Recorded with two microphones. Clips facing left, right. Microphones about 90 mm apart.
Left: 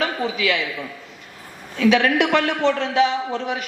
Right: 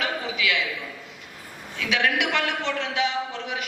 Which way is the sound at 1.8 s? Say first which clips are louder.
Left 8 dB; 40° left (ahead or behind).